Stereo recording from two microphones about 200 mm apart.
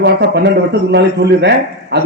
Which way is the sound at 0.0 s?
60° right (ahead or behind).